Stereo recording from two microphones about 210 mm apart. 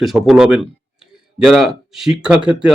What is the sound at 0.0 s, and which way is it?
Speech, centre (ahead or behind).